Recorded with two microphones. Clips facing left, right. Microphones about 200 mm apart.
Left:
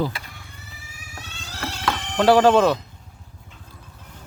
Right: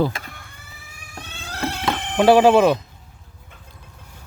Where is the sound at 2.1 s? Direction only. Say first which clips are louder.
Right 2 dB; 15° right (ahead or behind).